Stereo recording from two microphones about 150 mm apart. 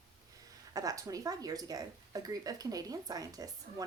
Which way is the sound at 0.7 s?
25° right (ahead or behind).